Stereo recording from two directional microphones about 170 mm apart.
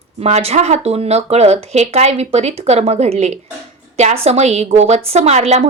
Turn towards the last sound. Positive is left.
turn(degrees=-40)  # may be behind; listen again after turning